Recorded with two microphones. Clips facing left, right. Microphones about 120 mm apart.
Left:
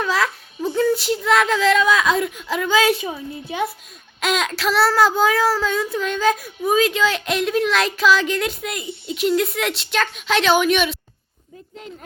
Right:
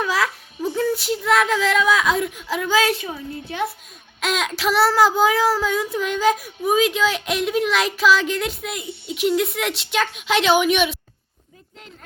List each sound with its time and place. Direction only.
0.0 s a child's voice: 5° right (ahead or behind)
2.9 s a woman's voice: 15° left (ahead or behind)
4.2 s child singing: centre (ahead or behind)
4.5 s child singing: 15° right (ahead or behind)